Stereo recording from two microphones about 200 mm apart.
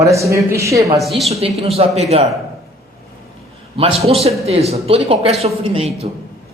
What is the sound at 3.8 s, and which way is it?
A man's voice, 30° right (ahead or behind).